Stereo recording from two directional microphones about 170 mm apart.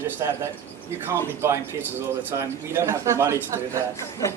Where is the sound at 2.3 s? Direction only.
15° right (ahead or behind).